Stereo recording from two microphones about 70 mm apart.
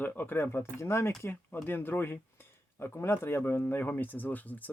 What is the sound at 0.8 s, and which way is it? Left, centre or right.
Speech, left.